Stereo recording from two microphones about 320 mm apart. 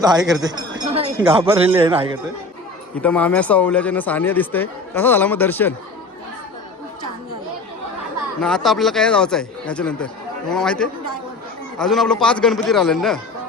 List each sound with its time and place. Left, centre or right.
0.0 s a man's voice: centre
0.4 s chink: centre
1.3 s a man's voice: centre
2.9 s speech: centre
8.4 s speech: centre